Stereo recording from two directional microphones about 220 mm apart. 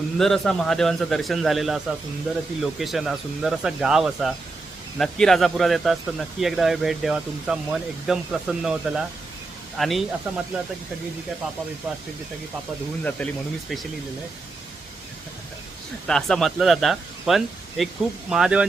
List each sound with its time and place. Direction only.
0.2 s speech: centre (ahead or behind)
11.9 s speech: 5° right (ahead or behind)
13.1 s speech: 5° left (ahead or behind)
16.0 s speech: centre (ahead or behind)